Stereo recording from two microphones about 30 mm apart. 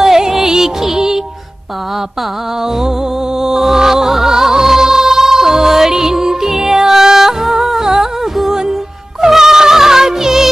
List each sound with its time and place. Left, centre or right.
0.0 s music: centre
3.3 s music: centre